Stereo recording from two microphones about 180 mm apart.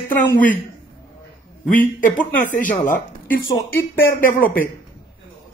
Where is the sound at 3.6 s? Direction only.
10° left (ahead or behind).